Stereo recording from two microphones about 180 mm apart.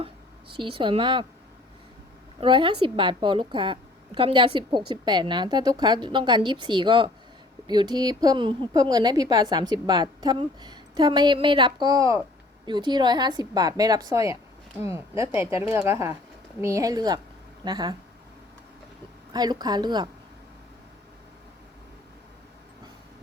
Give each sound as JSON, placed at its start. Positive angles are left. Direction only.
{"t": 0.5, "sound": "a woman's voice", "side_deg": -30}
{"t": 2.4, "sound": "a woman's voice", "side_deg": -30}
{"t": 19.3, "sound": "a woman's voice", "side_deg": -20}